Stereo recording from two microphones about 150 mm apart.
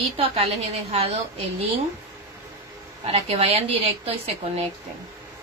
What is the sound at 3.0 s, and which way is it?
A woman's voice, 40° right (ahead or behind).